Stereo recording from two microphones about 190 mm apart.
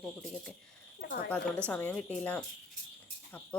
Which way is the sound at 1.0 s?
55° left (ahead or behind).